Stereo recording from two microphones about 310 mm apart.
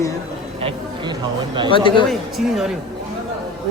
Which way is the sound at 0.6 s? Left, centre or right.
Centre.